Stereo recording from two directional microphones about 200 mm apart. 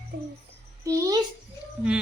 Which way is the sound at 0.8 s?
15° right (ahead or behind).